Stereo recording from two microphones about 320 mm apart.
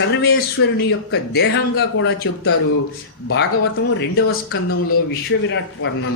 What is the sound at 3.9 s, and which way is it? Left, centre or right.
Speech, left.